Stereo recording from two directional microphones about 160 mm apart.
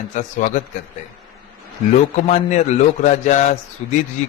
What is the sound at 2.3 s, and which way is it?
A man's voice, 50° left (ahead or behind).